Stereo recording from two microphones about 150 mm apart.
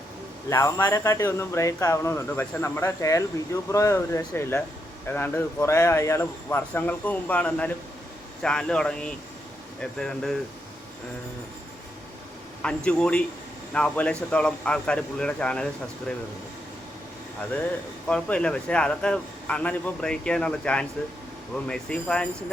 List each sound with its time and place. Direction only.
0.5 s a man's voice: 20° left (ahead or behind)
12.6 s a man's voice: 5° left (ahead or behind)
18.1 s a man's voice: 5° left (ahead or behind)